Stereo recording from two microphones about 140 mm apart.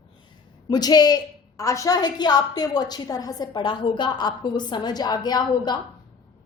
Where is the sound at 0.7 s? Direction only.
30° left (ahead or behind).